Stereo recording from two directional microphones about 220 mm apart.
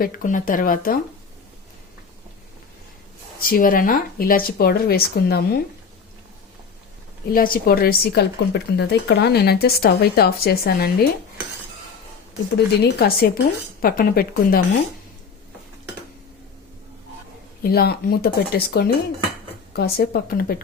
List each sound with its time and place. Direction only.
0.0 s speech: 35° left (ahead or behind)
3.4 s speech: 40° left (ahead or behind)
7.3 s speech: 40° left (ahead or behind)
12.5 s speech: 45° left (ahead or behind)
17.6 s speech: 45° left (ahead or behind)